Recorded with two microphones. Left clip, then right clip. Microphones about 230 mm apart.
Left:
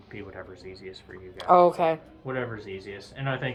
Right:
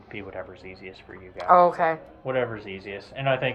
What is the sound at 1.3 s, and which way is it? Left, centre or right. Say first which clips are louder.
Speech: right 1 dB; left.